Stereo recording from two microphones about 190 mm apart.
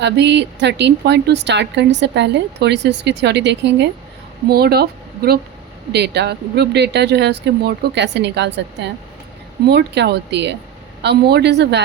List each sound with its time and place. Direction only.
0.0 s a woman's voice: 65° right (ahead or behind)